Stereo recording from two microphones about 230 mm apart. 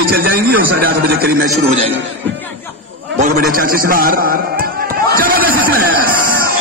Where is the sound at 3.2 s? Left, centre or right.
Right.